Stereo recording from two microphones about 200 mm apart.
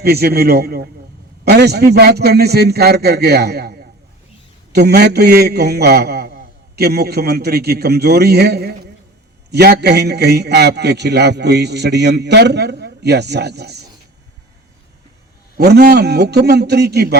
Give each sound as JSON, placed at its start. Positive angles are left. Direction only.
{"t": 0.0, "sound": "a man's voice", "side_deg": -50}
{"t": 15.5, "sound": "a man's voice", "side_deg": -55}